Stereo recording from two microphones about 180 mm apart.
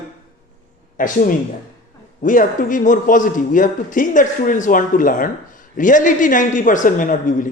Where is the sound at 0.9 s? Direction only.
50° left (ahead or behind).